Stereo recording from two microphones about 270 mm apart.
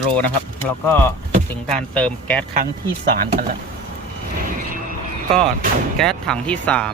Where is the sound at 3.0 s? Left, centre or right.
Right.